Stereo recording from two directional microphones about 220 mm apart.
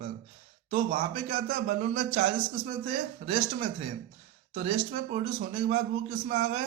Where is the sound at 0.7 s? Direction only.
30° right (ahead or behind).